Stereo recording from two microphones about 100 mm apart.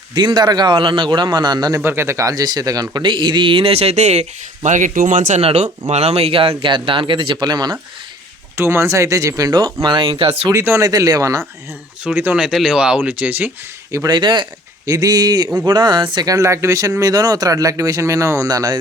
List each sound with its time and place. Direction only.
0.1 s speech: 50° right (ahead or behind)
1.8 s speech: 25° right (ahead or behind); by 4.3 s 90° right
5.4 s speech: 85° right
6.6 s speech: 55° right (ahead or behind)
8.5 s speech: 25° right (ahead or behind); by 10.5 s 65° right (ahead or behind)
10.5 s speech: 25° right (ahead or behind)
10.8 s speech: 35° right (ahead or behind)
12.0 s speech: 20° right (ahead or behind)
12.4 s speech: 5° right (ahead or behind)
14.1 s speech: 50° right (ahead or behind)
14.8 s speech: 40° right (ahead or behind)